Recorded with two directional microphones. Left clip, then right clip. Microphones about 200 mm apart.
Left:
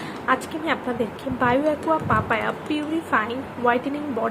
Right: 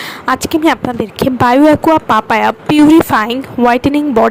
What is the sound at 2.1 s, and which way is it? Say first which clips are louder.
A woman's voice: right 11 dB; 60° right (ahead or behind).